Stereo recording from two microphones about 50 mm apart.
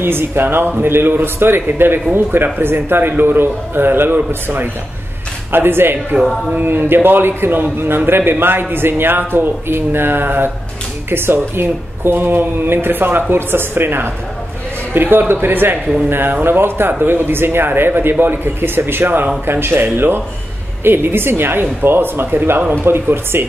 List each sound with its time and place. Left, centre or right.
0.0 s a man's voice: right